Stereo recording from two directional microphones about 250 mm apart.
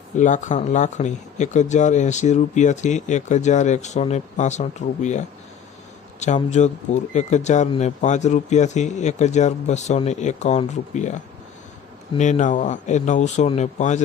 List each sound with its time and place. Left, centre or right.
0.2 s speech: left